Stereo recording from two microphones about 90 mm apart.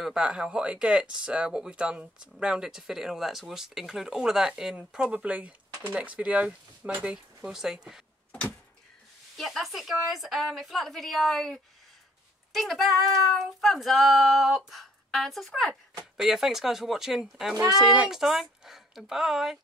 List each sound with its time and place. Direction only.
0.0 s speech: 10° right (ahead or behind)
7.4 s child singing: 5° right (ahead or behind)
8.3 s a sound: 15° left (ahead or behind)
9.4 s child singing: centre (ahead or behind)